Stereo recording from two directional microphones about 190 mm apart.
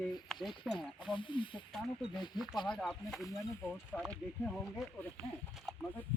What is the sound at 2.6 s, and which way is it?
Speech, centre (ahead or behind).